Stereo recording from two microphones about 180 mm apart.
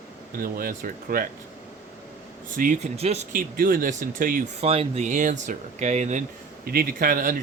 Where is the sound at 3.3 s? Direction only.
50° right (ahead or behind).